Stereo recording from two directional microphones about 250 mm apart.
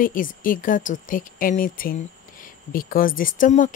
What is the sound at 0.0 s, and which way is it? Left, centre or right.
Speech, left.